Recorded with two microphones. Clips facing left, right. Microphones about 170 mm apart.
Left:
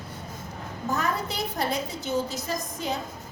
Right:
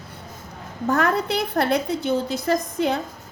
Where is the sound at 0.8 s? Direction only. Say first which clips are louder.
Right 7 dB; 65° right (ahead or behind).